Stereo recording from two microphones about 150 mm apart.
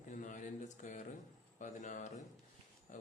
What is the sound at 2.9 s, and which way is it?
Pig, 60° left (ahead or behind).